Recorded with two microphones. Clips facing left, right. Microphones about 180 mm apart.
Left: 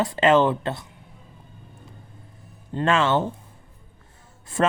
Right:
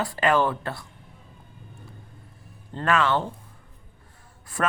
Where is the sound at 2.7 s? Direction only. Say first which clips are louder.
Left 2 dB; 20° left (ahead or behind).